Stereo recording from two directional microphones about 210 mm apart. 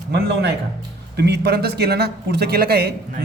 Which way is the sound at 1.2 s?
50° right (ahead or behind).